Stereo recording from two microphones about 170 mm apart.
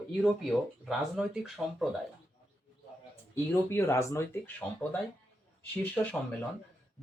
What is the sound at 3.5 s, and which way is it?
Speech, 15° left (ahead or behind).